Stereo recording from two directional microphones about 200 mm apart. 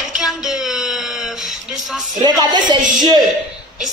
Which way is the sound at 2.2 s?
20° right (ahead or behind).